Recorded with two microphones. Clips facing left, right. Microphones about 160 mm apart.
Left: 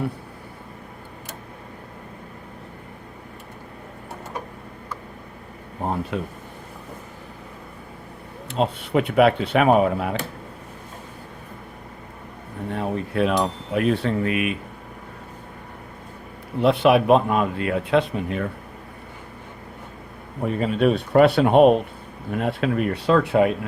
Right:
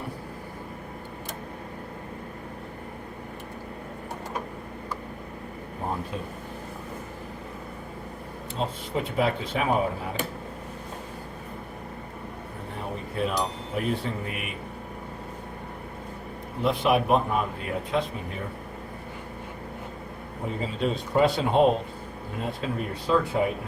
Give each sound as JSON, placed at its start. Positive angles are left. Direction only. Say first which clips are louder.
{"t": 6.1, "sound": "cutlery", "louder": "left 7 dB", "side_deg": 75}
{"t": 8.5, "sound": "cutlery", "louder": "left 8 dB", "side_deg": 70}
{"t": 12.7, "sound": "cutlery", "louder": "left 9 dB", "side_deg": 75}
{"t": 16.6, "sound": "cutlery", "louder": "left 7 dB", "side_deg": 75}
{"t": 20.4, "sound": "speech", "louder": "left 8 dB", "side_deg": 70}
{"t": 22.4, "sound": "cutlery", "louder": "left 8 dB", "side_deg": 70}